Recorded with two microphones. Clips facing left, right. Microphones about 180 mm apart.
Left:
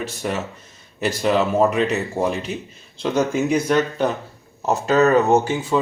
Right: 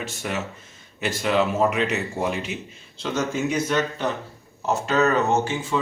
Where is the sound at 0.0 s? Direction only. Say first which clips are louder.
Left 4 dB; 35° left (ahead or behind).